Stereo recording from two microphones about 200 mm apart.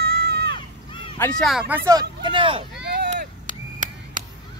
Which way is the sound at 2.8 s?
50° right (ahead or behind).